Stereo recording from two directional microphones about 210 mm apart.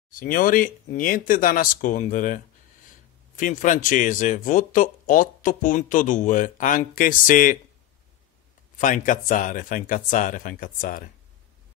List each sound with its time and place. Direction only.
0.1 s speech: 40° left (ahead or behind)
8.7 s speech: 35° left (ahead or behind)